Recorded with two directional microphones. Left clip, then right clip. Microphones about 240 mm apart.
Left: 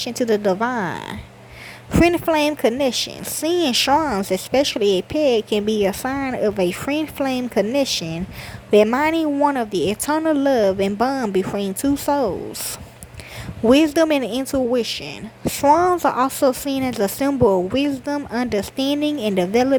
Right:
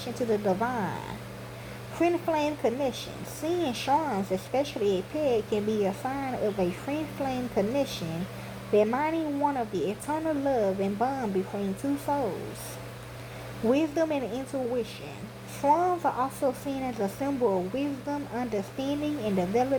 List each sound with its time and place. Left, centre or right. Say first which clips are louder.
0.0 s speech: left 9 dB; left
2.0 s speech: left 10 dB; left
13.7 s speech: left 11 dB; left